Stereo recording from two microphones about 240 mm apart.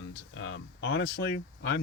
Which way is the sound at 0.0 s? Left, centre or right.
Left.